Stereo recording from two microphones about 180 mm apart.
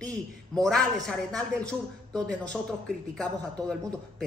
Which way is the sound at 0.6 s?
5° left (ahead or behind).